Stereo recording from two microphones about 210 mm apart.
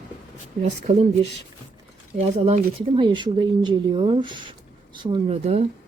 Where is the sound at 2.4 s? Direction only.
25° right (ahead or behind).